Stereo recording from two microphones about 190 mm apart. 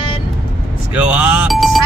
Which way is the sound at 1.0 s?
5° right (ahead or behind).